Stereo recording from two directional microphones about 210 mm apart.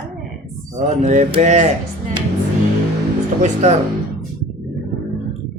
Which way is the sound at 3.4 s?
30° right (ahead or behind).